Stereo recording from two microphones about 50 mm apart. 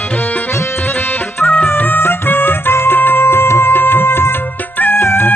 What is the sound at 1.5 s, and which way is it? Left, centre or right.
Music, left.